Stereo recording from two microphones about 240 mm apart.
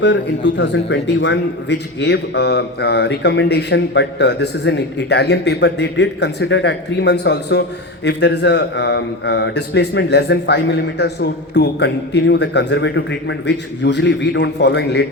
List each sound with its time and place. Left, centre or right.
0.0 s a man's voice: left